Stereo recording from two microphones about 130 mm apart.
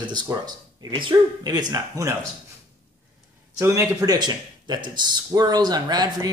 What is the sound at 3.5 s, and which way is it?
Speech, 25° right (ahead or behind).